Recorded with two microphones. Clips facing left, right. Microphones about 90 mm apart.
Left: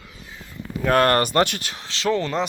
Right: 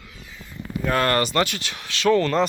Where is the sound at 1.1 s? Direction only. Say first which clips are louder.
Left 2 dB; 45° left (ahead or behind).